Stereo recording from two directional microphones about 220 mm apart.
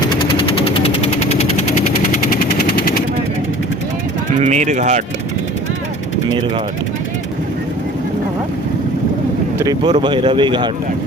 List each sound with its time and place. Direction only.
0.0 s vehicle: 20° left (ahead or behind); by 3.0 s 45° left (ahead or behind)
4.4 s speech: 30° right (ahead or behind)
9.6 s speech: 20° right (ahead or behind)